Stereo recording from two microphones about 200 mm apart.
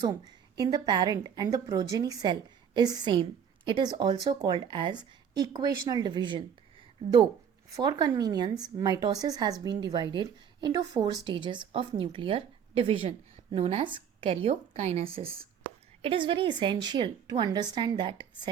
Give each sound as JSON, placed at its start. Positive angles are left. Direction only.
{"t": 0.0, "sound": "a woman's voice", "side_deg": -20}
{"t": 7.7, "sound": "a woman's voice", "side_deg": -20}